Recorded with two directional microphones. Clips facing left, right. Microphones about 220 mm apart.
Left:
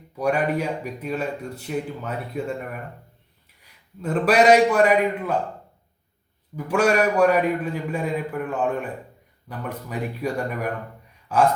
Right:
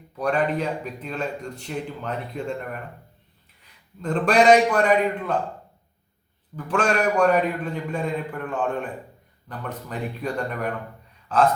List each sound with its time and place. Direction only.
0.2 s a man's voice: 10° left (ahead or behind)
4.0 s a man's voice: 5° left (ahead or behind)
6.7 s a man's voice: 10° left (ahead or behind)
11.3 s a sound: 10° left (ahead or behind)